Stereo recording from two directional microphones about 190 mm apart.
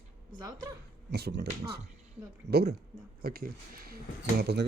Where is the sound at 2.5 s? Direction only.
60° right (ahead or behind).